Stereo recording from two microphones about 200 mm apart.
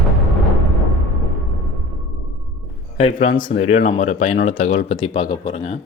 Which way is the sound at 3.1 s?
40° left (ahead or behind).